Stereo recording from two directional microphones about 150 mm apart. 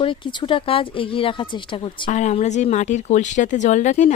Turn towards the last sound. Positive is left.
turn(degrees=55)  # may be behind; listen again after turning